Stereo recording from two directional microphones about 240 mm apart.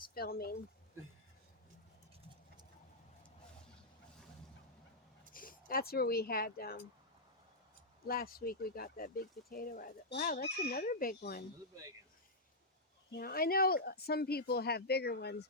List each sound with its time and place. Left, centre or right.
0.1 s speech: left
5.3 s speech: left
8.0 s speech: left
13.1 s speech: left